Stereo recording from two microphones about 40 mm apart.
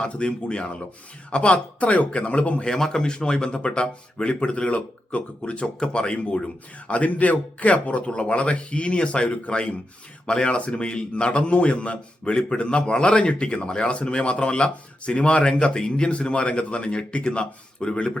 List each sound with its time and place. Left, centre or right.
0.0 s a man's voice: left
2.6 s a man's voice: centre